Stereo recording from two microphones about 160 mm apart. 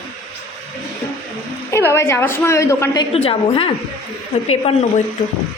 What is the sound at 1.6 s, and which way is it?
A woman's voice, 15° left (ahead or behind).